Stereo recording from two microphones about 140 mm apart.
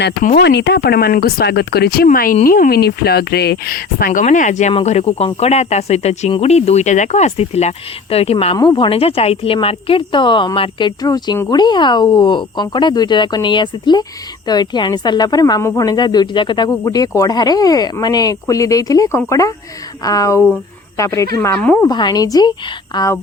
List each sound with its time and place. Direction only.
0.8 s speech: 90° left; by 4.7 s 60° left (ahead or behind)
4.7 s speech: 45° left (ahead or behind)
8.5 s a woman's voice: 30° left (ahead or behind); by 21.8 s 10° left (ahead or behind)
21.8 s speech: 30° left (ahead or behind)